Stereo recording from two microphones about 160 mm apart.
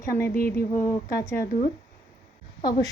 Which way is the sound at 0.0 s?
15° left (ahead or behind).